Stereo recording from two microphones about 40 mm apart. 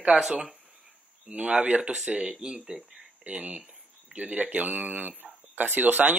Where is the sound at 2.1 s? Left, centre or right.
Right.